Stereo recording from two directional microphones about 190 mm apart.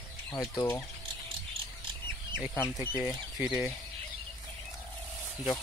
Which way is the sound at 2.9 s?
5° right (ahead or behind).